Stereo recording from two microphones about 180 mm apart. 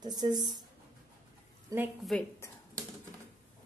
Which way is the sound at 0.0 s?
20° right (ahead or behind).